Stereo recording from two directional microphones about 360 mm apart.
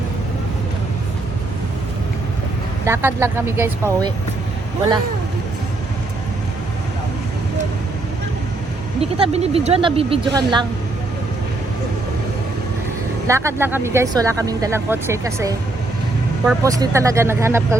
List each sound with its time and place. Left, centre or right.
2.8 s speech: centre
9.0 s speech: centre
13.2 s speech: centre